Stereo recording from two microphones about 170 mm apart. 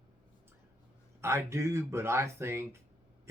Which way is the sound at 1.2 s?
15° right (ahead or behind).